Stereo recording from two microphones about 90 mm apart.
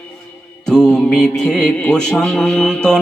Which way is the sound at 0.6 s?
5° left (ahead or behind).